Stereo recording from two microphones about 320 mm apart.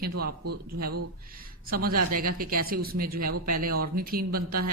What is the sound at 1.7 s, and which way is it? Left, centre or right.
A woman's voice, right.